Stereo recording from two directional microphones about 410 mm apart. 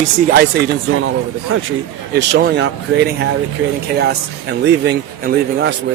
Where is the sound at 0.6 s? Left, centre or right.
Right.